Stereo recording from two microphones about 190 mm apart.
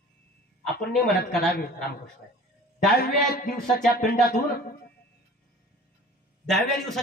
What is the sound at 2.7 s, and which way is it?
A man's voice, 55° left (ahead or behind).